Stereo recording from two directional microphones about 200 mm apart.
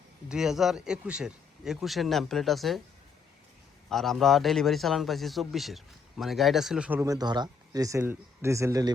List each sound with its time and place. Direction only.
0.3 s a man's voice: 5° right (ahead or behind)
3.8 s a man's voice: centre (ahead or behind)
7.0 s speech: 20° right (ahead or behind)